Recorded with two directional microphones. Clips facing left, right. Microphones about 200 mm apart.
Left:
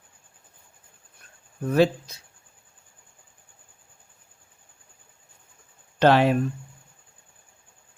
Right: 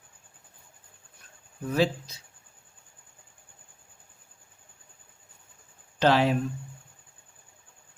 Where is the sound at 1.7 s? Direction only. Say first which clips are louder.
Left 5 dB; 55° left (ahead or behind).